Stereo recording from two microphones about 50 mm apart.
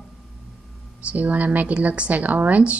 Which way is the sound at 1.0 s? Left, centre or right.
Right.